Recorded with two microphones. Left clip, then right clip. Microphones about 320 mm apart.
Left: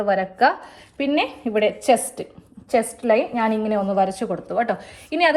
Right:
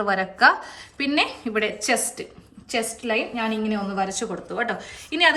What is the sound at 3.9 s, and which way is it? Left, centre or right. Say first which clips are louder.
A woman's voice: left 5 dB; centre.